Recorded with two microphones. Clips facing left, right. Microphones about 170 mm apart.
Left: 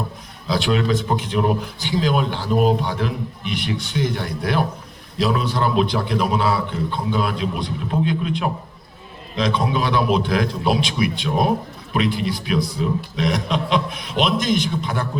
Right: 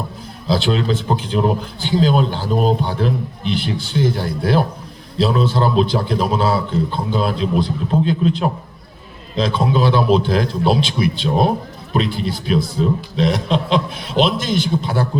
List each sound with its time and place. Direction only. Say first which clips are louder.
0.4 s a man's voice: right 2 dB; 30° right (ahead or behind)